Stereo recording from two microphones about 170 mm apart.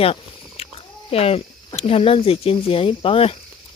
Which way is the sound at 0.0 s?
35° left (ahead or behind).